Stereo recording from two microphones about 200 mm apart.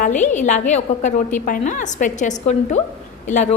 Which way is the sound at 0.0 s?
35° left (ahead or behind).